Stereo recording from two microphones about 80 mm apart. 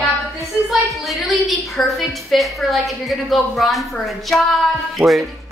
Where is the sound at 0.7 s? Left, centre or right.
Centre.